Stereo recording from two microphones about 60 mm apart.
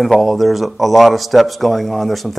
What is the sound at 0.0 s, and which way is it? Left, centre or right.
Speech, centre.